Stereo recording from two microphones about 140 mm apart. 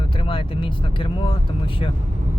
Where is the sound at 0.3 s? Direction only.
40° left (ahead or behind).